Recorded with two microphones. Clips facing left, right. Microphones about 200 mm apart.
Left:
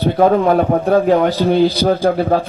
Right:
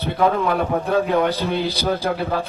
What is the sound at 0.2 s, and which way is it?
A man's voice, 45° left (ahead or behind).